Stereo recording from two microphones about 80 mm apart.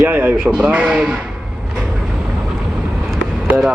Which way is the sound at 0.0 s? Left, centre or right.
Right.